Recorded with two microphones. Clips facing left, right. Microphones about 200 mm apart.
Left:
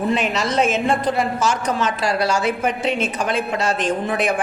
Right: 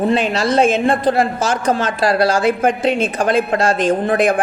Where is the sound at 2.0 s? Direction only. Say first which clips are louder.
Right 5 dB; 35° right (ahead or behind).